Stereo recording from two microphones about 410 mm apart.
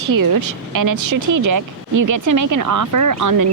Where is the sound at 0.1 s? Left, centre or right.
Right.